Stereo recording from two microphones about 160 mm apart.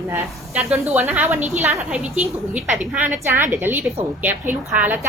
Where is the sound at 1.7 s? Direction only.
Centre (ahead or behind).